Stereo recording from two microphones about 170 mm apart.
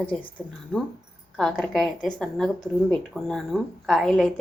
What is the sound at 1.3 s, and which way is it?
A woman's voice, centre (ahead or behind).